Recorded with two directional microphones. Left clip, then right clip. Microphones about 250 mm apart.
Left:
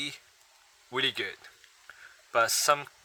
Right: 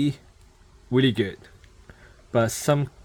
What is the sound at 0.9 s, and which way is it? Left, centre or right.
Speech, centre.